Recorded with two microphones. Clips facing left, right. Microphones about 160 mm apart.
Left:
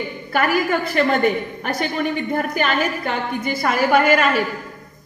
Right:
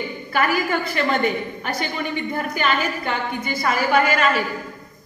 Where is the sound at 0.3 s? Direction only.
50° left (ahead or behind).